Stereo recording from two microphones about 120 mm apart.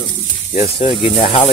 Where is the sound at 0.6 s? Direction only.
50° left (ahead or behind).